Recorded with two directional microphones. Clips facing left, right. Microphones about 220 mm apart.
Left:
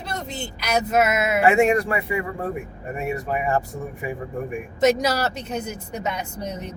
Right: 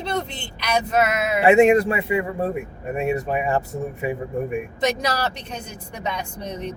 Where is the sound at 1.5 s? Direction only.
25° right (ahead or behind).